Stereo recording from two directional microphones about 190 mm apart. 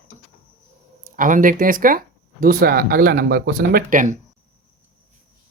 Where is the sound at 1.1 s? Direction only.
45° right (ahead or behind).